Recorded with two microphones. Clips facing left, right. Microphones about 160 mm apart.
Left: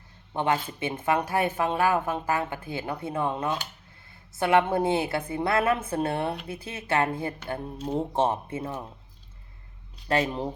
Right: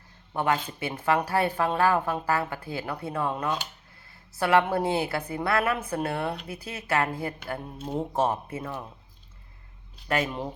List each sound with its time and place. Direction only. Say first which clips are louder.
0.3 s a woman's voice: even; 20° left (ahead or behind)
10.1 s a woman's voice: left 2 dB; 30° left (ahead or behind)